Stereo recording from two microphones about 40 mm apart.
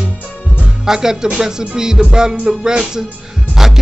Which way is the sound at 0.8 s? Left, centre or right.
Centre.